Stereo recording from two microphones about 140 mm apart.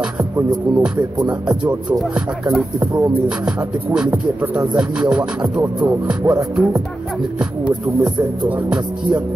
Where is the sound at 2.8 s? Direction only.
20° right (ahead or behind).